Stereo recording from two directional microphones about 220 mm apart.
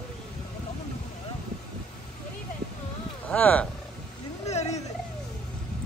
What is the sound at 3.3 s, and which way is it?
Speech, 5° left (ahead or behind).